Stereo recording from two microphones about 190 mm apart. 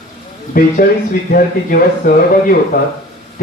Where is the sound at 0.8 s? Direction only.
45° left (ahead or behind).